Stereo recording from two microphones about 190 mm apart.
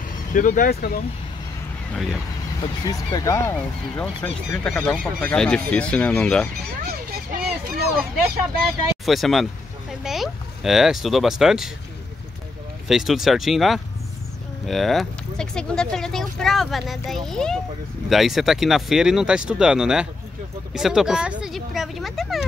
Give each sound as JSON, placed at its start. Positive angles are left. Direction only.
{"t": 0.3, "sound": "speech", "side_deg": 45}
{"t": 2.6, "sound": "speech", "side_deg": 20}
{"t": 6.9, "sound": "honk", "side_deg": -55}
{"t": 9.0, "sound": "speech", "side_deg": 0}
{"t": 12.8, "sound": "speech", "side_deg": 0}